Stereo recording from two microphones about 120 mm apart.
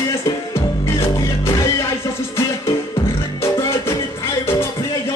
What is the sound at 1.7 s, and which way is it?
Music, 20° left (ahead or behind).